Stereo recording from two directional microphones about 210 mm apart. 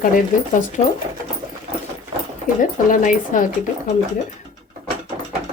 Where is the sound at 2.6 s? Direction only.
40° left (ahead or behind).